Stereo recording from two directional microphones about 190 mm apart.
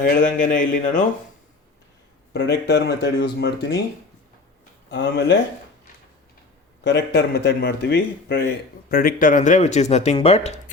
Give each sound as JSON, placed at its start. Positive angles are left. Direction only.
{"t": 0.0, "sound": "speech", "side_deg": 45}
{"t": 2.3, "sound": "speech", "side_deg": 65}
{"t": 4.9, "sound": "speech", "side_deg": 65}
{"t": 6.8, "sound": "speech", "side_deg": 65}